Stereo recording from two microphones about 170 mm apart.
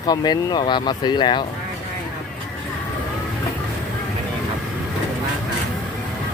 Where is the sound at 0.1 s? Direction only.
25° left (ahead or behind).